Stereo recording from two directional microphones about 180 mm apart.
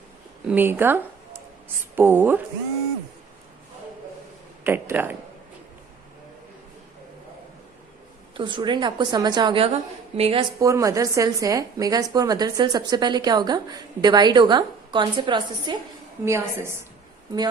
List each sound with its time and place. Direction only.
0.4 s speech: 10° right (ahead or behind)
4.6 s speech: 10° right (ahead or behind)
8.4 s a woman's voice: 25° right (ahead or behind)
10.6 s a woman's voice: 15° right (ahead or behind)
16.2 s speech: 15° right (ahead or behind)